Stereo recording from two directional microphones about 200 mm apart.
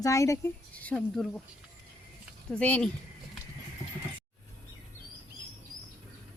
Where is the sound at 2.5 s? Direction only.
5° left (ahead or behind).